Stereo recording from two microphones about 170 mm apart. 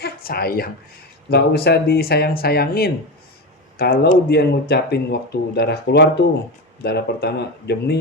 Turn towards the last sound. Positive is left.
turn(degrees=75)  # may be behind; listen again after turning